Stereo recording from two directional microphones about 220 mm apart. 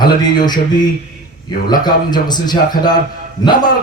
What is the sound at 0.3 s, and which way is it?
Speech, 20° left (ahead or behind).